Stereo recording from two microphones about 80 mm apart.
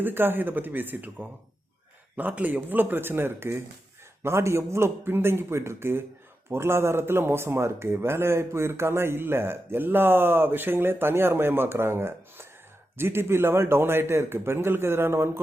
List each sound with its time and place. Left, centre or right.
0.0 s a man's voice: right